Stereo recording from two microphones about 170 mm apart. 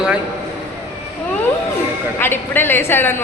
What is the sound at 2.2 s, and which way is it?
A woman's voice, 15° left (ahead or behind).